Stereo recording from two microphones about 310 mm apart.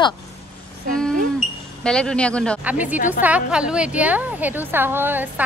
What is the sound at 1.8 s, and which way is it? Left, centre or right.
A woman's voice, centre.